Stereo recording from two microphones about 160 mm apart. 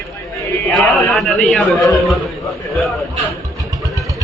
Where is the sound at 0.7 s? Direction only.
Centre (ahead or behind).